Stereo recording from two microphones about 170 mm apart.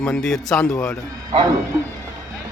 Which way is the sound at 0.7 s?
15° left (ahead or behind).